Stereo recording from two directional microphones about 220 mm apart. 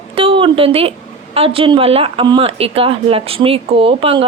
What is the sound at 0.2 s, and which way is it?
A woman's voice, 25° right (ahead or behind).